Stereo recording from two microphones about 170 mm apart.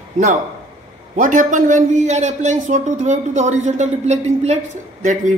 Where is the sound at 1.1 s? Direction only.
50° right (ahead or behind).